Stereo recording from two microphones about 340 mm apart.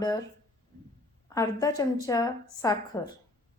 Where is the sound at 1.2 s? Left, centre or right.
Centre.